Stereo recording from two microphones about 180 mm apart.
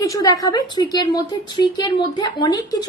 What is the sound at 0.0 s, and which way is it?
A woman's voice, 20° left (ahead or behind).